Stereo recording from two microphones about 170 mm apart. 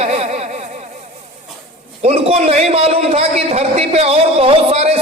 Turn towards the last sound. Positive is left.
turn(degrees=-35)  # may be behind; listen again after turning